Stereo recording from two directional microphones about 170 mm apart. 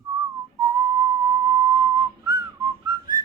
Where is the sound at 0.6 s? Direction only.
20° right (ahead or behind).